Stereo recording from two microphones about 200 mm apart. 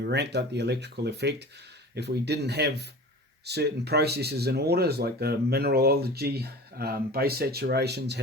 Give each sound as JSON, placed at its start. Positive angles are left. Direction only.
{"t": 0.0, "sound": "speech", "side_deg": -55}